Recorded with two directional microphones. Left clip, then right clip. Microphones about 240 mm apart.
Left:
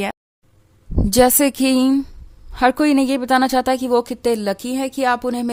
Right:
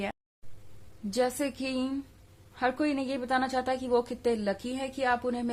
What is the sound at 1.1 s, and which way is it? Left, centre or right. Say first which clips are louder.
A woman's voice: left 15 dB; left.